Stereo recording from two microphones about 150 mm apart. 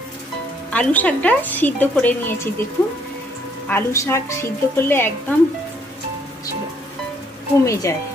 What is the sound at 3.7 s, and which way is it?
A woman's voice, 15° left (ahead or behind).